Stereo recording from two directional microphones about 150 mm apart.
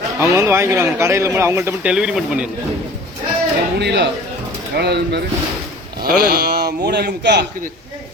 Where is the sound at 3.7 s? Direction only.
90° right.